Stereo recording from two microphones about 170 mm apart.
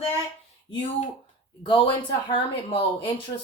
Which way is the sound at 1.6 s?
30° left (ahead or behind).